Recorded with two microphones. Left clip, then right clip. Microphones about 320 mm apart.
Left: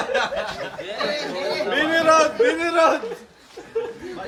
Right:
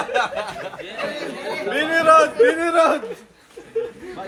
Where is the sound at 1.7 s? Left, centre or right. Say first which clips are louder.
Right 3 dB; right.